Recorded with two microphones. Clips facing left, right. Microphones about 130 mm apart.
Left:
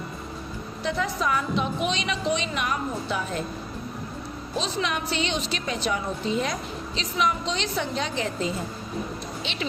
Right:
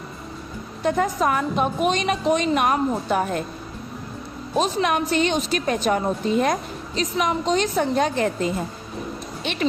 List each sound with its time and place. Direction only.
0.8 s a woman's voice: 50° right (ahead or behind)
4.5 s a woman's voice: 50° right (ahead or behind)